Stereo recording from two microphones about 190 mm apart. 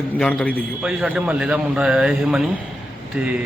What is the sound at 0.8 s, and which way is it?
A man's voice, 5° right (ahead or behind).